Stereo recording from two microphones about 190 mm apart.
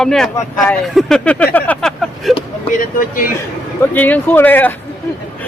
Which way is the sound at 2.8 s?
45° left (ahead or behind).